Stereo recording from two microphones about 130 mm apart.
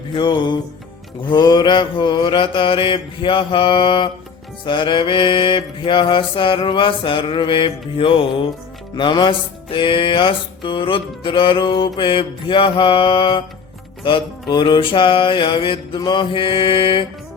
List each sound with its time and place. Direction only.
0.1 s music: 35° left (ahead or behind)